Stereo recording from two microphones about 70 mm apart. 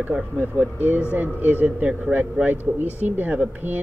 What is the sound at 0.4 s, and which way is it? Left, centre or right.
Speech, left.